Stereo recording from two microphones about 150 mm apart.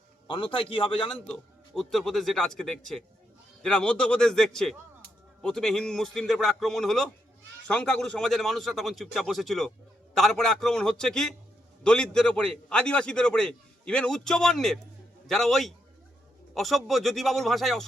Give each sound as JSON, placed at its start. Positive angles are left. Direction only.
{"t": 0.3, "sound": "a man's voice", "side_deg": 30}
{"t": 1.3, "sound": "a man's voice", "side_deg": 0}